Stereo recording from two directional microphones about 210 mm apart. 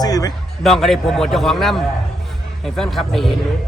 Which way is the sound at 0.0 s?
15° left (ahead or behind).